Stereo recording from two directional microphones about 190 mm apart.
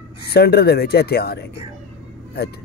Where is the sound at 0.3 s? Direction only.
55° left (ahead or behind).